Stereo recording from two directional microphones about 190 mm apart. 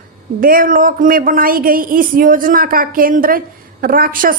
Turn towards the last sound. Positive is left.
turn(degrees=-45)  # may be behind; listen again after turning